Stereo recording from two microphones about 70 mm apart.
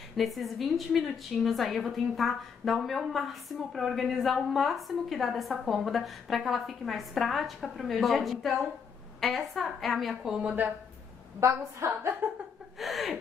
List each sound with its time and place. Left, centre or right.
0.2 s a woman's voice: centre
10.4 s speech: right
11.3 s a woman's voice: right
12.7 s a woman's voice: centre